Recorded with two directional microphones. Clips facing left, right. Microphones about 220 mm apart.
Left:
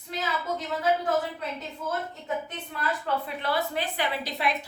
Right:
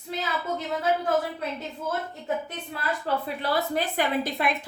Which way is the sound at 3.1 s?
35° right (ahead or behind).